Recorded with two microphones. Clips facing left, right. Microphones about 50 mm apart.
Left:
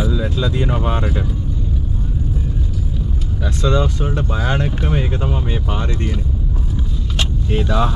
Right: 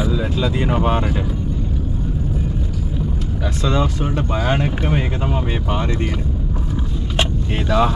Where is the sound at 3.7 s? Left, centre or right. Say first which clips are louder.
Left 1 dB; right.